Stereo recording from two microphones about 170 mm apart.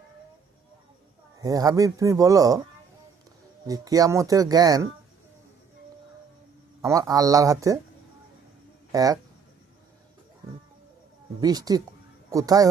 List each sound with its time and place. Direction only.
1.4 s speech: 20° right (ahead or behind)
3.7 s speech: 20° right (ahead or behind)
6.8 s speech: 20° right (ahead or behind)
8.9 s speech: 20° right (ahead or behind)
11.3 s speech: 20° right (ahead or behind)